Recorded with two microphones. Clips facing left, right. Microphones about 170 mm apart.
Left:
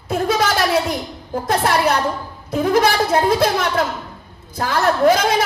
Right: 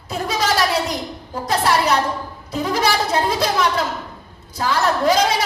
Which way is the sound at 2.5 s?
50° left (ahead or behind).